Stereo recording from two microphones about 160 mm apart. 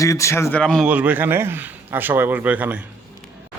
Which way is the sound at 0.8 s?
10° right (ahead or behind).